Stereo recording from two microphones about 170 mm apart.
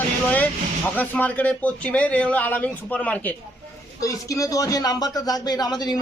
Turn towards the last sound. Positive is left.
turn(degrees=25)  # may be behind; listen again after turning